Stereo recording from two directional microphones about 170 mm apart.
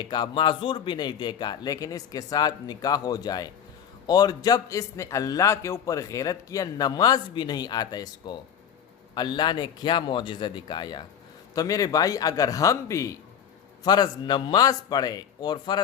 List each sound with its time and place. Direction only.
0.0 s a man's voice: 25° left (ahead or behind)